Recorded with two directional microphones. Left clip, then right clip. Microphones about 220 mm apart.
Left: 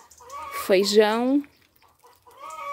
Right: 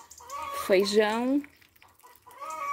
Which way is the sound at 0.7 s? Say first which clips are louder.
Left 5 dB; 20° left (ahead or behind).